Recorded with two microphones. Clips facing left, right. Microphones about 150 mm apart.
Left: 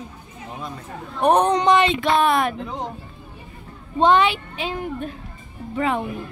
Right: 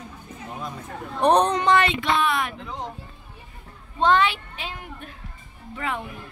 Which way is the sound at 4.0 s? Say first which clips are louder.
Left 3 dB; 20° left (ahead or behind).